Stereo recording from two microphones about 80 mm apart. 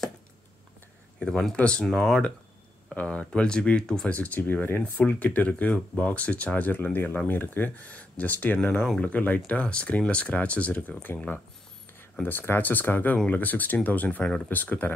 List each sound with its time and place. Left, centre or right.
1.2 s speech: centre